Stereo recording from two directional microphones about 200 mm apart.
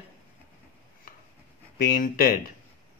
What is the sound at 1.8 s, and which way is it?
Speech, 45° left (ahead or behind).